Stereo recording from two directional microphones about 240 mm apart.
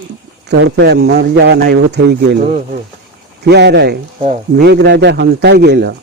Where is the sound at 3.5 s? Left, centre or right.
Right.